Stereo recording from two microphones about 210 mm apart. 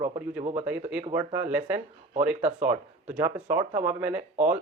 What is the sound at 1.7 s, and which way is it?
Speech, 35° right (ahead or behind).